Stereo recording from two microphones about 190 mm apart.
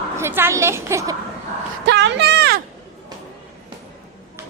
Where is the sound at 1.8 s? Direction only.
65° right (ahead or behind).